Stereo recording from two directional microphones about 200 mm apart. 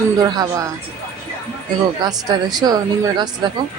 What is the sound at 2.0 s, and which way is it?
Speech, 20° right (ahead or behind).